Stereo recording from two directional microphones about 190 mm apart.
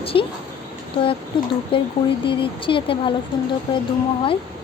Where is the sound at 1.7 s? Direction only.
30° left (ahead or behind).